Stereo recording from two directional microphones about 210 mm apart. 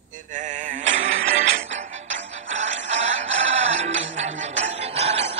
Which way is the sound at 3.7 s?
35° right (ahead or behind).